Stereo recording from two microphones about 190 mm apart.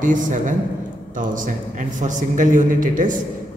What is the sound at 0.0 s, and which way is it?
A man's voice, 45° right (ahead or behind).